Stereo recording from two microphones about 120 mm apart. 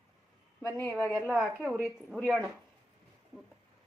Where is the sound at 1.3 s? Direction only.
10° right (ahead or behind).